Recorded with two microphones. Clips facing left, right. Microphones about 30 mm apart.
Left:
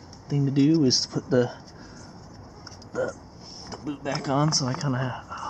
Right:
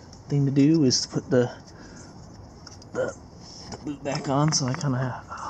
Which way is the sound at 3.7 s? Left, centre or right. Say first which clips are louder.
Even; centre.